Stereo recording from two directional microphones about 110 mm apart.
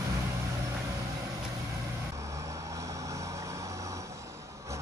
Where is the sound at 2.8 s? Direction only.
30° right (ahead or behind).